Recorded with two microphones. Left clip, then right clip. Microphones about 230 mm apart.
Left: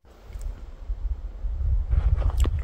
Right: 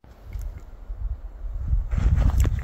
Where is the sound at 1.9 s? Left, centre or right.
Right.